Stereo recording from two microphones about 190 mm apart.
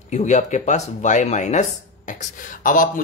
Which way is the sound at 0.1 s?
35° left (ahead or behind).